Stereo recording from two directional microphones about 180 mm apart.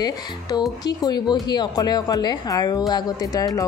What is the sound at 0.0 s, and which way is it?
A woman's voice, 20° left (ahead or behind).